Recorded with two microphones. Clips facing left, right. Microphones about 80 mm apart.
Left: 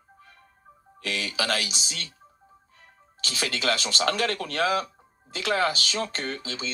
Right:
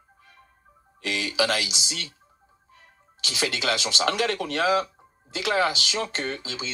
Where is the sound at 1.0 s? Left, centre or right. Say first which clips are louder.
Right 3 dB; right.